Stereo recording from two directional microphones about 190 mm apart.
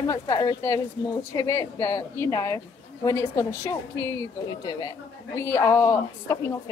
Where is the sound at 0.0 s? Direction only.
20° left (ahead or behind).